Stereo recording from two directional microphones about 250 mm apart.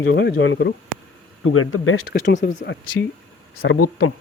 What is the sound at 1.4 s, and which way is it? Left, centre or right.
Speech, left.